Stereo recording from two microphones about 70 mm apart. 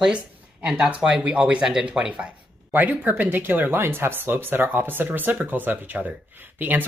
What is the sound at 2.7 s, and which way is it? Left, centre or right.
Speech, right.